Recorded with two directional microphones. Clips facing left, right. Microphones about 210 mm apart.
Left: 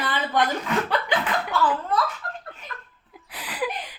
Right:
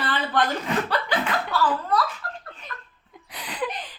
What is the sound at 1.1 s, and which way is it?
Chuckle, 20° left (ahead or behind).